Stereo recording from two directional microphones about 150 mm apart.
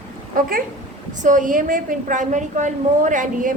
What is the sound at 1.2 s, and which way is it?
A woman's voice, 60° right (ahead or behind).